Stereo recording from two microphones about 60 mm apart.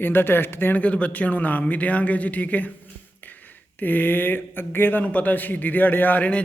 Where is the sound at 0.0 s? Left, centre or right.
Left.